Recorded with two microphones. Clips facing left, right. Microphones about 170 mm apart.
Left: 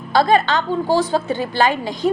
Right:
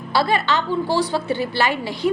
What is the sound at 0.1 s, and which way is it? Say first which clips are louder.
A woman's voice: left 4 dB; 45° left (ahead or behind).